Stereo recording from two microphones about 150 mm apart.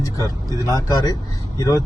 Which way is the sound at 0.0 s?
25° left (ahead or behind).